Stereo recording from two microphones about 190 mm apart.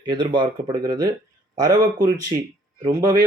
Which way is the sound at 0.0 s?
25° right (ahead or behind).